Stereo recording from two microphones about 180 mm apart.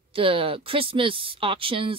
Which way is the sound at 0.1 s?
30° right (ahead or behind).